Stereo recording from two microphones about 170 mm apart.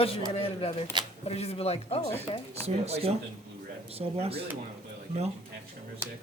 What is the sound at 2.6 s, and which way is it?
Speech, 40° right (ahead or behind).